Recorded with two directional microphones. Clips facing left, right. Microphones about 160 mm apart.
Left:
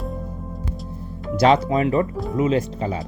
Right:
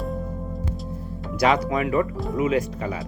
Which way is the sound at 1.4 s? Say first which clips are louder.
Left 4 dB; 25° left (ahead or behind).